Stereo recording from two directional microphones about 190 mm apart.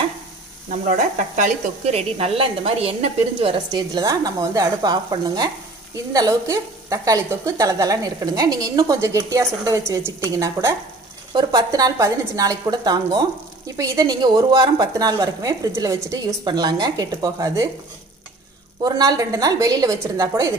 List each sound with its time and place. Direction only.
0.7 s speech: 40° right (ahead or behind); by 17.6 s 20° right (ahead or behind)
18.8 s speech: 20° right (ahead or behind)